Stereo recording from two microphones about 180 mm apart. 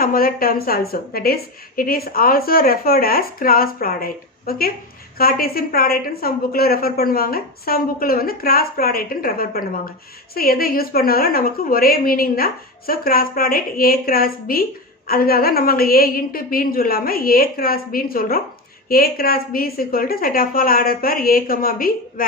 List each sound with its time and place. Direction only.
0.0 s a woman's voice: 55° left (ahead or behind)